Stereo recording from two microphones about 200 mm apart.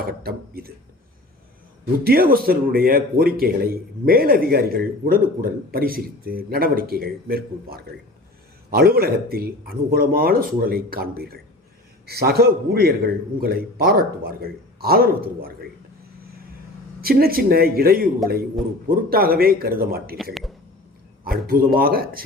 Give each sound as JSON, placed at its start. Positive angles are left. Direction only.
{"t": 0.0, "sound": "a sound", "side_deg": -50}
{"t": 1.8, "sound": "speech", "side_deg": -50}
{"t": 17.0, "sound": "speech", "side_deg": -50}
{"t": 19.1, "sound": "speech", "side_deg": -50}
{"t": 21.2, "sound": "speech", "side_deg": -50}